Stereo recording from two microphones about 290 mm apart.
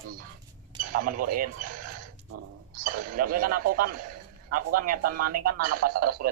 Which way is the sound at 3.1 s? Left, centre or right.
Right.